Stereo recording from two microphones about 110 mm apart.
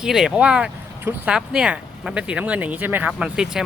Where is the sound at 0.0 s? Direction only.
5° right (ahead or behind).